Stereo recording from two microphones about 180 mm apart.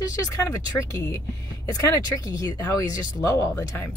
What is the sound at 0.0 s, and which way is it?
Speech, 20° left (ahead or behind).